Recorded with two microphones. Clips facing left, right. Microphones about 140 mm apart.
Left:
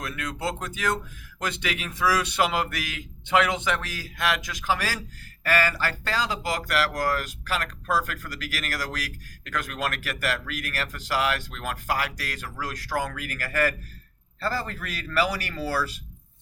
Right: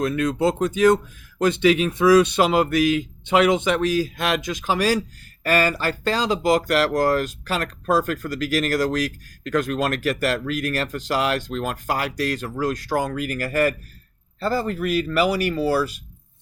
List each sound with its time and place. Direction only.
0.0 s speech: 25° right (ahead or behind)